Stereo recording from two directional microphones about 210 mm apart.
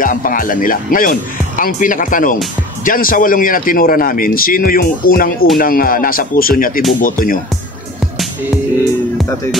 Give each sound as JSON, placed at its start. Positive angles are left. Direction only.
{"t": 0.0, "sound": "a man's voice", "side_deg": 40}